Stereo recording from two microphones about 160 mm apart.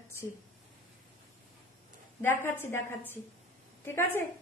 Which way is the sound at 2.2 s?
15° left (ahead or behind).